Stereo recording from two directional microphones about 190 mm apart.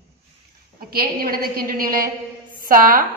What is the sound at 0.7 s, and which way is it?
A woman's voice, 50° right (ahead or behind).